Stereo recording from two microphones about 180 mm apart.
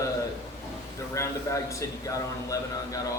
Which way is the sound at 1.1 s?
15° left (ahead or behind).